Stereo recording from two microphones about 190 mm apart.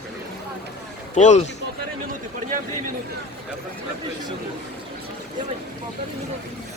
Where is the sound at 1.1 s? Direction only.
40° left (ahead or behind).